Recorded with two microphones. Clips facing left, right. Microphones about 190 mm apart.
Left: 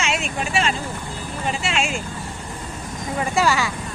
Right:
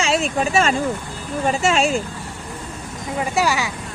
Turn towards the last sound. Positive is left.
turn(degrees=-15)  # may be behind; listen again after turning